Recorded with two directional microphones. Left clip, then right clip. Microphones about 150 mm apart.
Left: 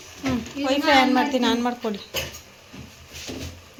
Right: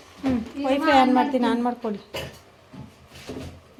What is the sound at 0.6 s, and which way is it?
A woman's voice, 15° right (ahead or behind).